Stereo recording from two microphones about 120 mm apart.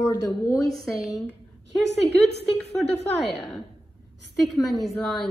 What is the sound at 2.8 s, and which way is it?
A woman's voice, centre (ahead or behind).